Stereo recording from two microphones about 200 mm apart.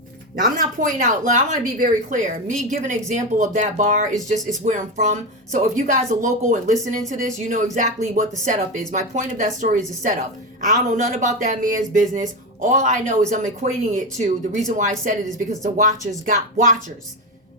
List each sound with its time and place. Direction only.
0.3 s a woman's voice: 45° right (ahead or behind)